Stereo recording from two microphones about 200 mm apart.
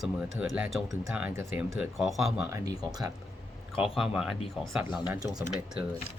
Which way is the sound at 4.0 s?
Centre (ahead or behind).